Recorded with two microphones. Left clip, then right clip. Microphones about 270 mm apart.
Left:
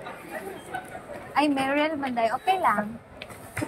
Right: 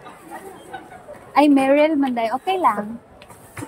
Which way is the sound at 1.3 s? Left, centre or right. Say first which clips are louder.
Right 9 dB; right.